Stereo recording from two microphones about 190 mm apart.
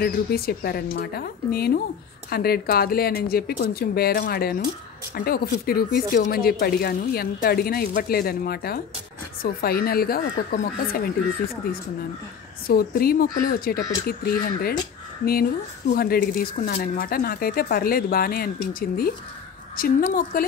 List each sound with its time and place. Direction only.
0.0 s speech: 55° left (ahead or behind)
15.9 s speech: 50° left (ahead or behind)